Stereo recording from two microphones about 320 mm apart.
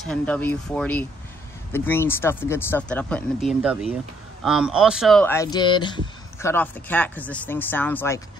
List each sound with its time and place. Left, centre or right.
0.0 s speech: centre